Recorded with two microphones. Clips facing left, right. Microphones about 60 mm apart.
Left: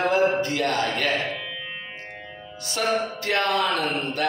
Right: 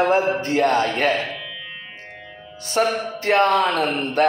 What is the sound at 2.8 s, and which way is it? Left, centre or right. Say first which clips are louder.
Speech: right 4 dB; right.